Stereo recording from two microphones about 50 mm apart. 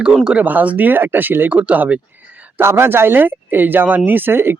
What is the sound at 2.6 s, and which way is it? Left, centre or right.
Speech, right.